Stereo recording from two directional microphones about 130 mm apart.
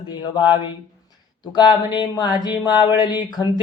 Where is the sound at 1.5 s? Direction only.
35° left (ahead or behind).